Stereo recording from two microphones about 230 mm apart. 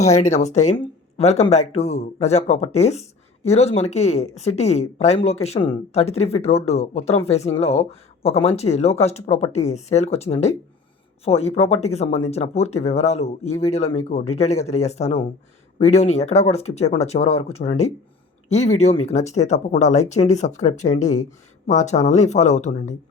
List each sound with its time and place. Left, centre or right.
0.0 s speech: left